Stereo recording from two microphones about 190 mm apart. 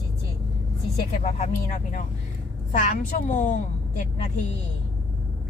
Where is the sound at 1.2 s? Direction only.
35° left (ahead or behind).